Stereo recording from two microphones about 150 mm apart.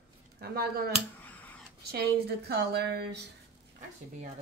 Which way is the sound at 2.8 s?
90° right.